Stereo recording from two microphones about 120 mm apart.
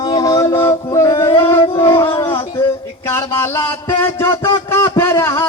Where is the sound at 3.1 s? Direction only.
20° left (ahead or behind).